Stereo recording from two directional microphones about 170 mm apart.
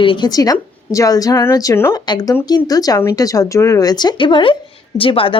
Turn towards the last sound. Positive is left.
turn(degrees=30)  # may be behind; listen again after turning